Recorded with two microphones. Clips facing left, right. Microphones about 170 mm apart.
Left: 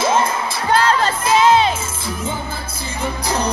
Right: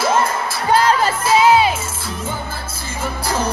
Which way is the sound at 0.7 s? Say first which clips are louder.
Right 1 dB; 10° right (ahead or behind).